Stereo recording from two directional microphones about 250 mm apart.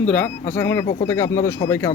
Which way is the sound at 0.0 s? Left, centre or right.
Centre.